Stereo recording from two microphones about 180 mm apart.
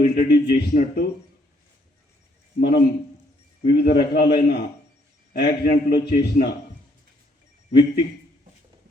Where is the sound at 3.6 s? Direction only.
60° left (ahead or behind).